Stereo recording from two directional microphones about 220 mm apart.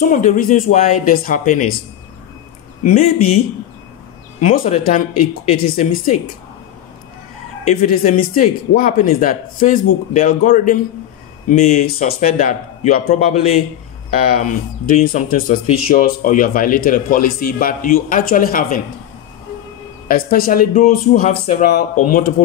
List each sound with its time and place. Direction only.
0.0 s speech: 35° left (ahead or behind)
2.8 s speech: 30° left (ahead or behind)
4.4 s speech: 35° left (ahead or behind)
7.6 s speech: 35° left (ahead or behind)
15.0 s speech: 35° left (ahead or behind)
20.1 s speech: 40° left (ahead or behind)